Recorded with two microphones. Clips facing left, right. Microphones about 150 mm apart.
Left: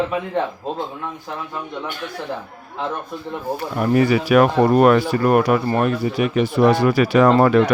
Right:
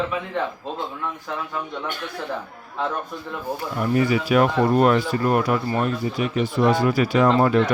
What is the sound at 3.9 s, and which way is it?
Speech, 70° left (ahead or behind).